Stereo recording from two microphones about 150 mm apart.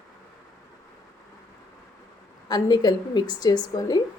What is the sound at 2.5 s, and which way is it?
A woman's voice, 25° left (ahead or behind).